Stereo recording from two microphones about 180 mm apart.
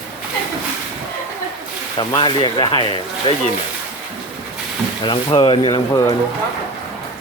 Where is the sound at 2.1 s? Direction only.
25° left (ahead or behind).